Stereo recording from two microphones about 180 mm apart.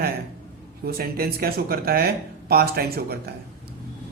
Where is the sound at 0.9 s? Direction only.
55° right (ahead or behind).